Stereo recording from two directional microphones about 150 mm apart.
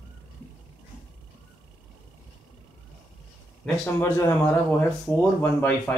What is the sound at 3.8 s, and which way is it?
Speech, 15° left (ahead or behind).